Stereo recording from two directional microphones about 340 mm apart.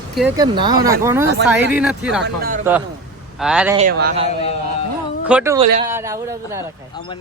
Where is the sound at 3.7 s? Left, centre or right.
Right.